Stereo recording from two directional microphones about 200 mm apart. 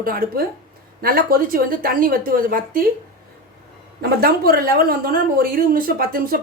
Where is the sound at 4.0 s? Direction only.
50° right (ahead or behind).